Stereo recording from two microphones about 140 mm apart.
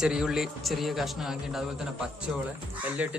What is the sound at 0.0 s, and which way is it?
Speech, 5° right (ahead or behind).